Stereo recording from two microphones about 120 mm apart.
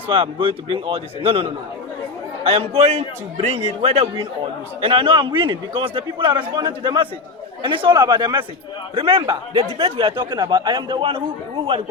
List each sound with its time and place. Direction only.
0.1 s a man's voice: 45° right (ahead or behind)